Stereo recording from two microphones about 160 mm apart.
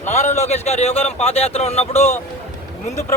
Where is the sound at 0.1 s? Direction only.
45° left (ahead or behind).